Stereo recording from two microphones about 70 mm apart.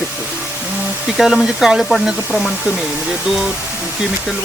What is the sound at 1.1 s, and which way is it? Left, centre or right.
Speech, centre.